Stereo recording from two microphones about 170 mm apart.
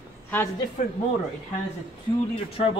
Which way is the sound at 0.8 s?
45° left (ahead or behind).